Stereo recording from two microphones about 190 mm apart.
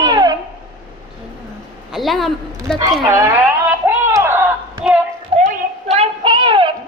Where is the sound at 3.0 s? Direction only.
15° right (ahead or behind).